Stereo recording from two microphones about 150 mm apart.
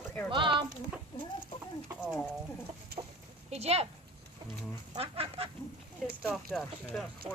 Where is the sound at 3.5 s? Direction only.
45° right (ahead or behind).